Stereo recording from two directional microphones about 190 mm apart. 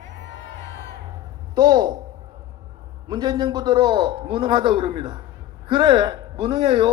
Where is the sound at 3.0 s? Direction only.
20° right (ahead or behind).